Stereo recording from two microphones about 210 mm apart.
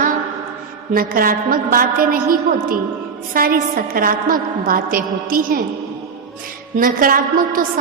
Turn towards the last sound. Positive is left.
turn(degrees=-40)  # may be behind; listen again after turning